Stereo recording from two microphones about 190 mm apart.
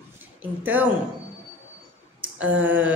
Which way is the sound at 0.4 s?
10° right (ahead or behind).